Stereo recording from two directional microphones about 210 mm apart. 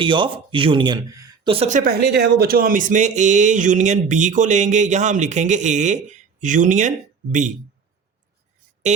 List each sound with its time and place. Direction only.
0.0 s speech: 25° right (ahead or behind)